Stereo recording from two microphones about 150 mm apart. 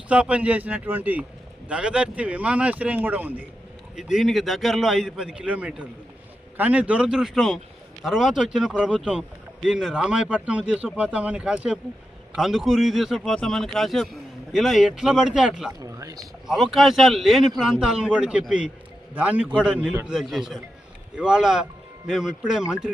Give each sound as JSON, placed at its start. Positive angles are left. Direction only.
{"t": 0.1, "sound": "a man's voice", "side_deg": -10}
{"t": 15.8, "sound": "a sound", "side_deg": -20}
{"t": 16.5, "sound": "a man's voice", "side_deg": -5}